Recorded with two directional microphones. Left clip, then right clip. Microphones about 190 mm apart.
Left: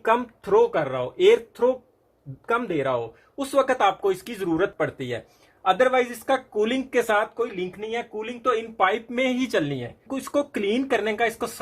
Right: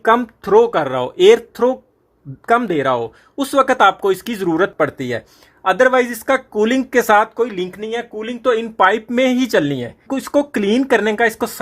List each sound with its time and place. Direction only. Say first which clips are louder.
0.0 s speech: right 8 dB; 45° right (ahead or behind)